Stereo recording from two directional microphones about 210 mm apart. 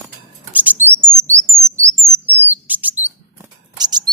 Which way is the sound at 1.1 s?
15° right (ahead or behind).